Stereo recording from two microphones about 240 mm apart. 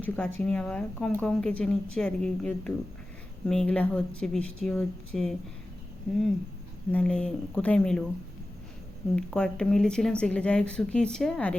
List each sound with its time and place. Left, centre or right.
0.0 s speech: centre
6.9 s speech: centre
9.1 s speech: centre